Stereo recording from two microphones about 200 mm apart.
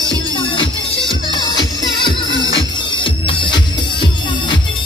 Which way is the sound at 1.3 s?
20° left (ahead or behind).